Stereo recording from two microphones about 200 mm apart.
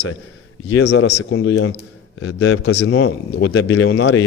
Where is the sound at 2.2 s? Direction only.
80° left.